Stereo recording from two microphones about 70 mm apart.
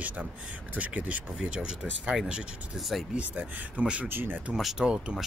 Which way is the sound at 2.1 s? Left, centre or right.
Centre.